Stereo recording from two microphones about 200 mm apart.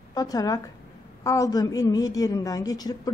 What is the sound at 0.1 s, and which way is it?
A woman's voice, 20° left (ahead or behind).